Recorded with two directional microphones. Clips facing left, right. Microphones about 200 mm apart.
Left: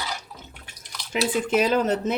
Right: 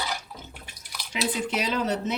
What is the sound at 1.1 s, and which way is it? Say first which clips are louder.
Speech: left 6 dB; 50° left (ahead or behind).